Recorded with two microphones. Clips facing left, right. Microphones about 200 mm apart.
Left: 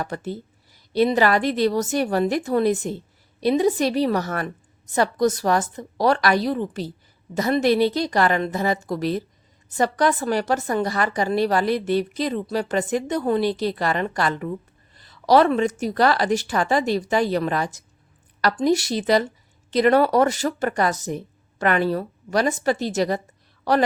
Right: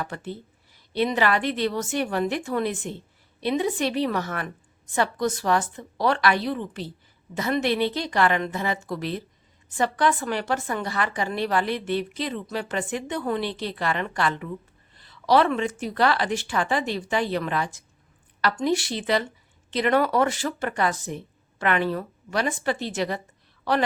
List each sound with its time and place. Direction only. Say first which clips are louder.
0.0 s a woman's voice: left 4 dB; 40° left (ahead or behind)